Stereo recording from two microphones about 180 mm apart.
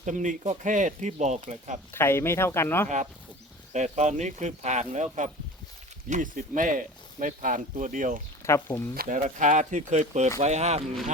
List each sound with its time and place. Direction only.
0.0 s speech: 45° right (ahead or behind)
1.9 s speech: 15° left (ahead or behind)
3.7 s speech: 40° right (ahead or behind)
8.4 s speech: 15° left (ahead or behind)
9.0 s speech: 45° right (ahead or behind)